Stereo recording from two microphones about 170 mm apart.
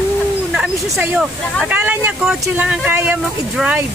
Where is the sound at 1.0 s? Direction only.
10° right (ahead or behind).